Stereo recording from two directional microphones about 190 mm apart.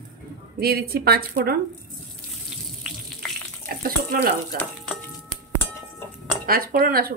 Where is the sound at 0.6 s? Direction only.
55° right (ahead or behind).